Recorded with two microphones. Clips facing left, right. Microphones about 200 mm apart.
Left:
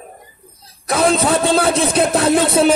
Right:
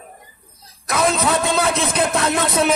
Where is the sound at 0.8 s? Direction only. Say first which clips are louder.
Left 4 dB; 30° left (ahead or behind).